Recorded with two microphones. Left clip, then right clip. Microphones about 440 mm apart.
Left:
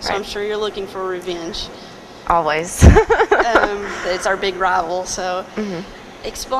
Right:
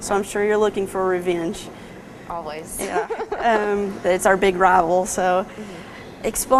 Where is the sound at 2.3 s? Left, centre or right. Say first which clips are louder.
Left 14 dB; left.